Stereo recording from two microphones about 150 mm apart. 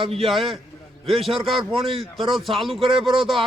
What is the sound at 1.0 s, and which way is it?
Speech, 40° right (ahead or behind).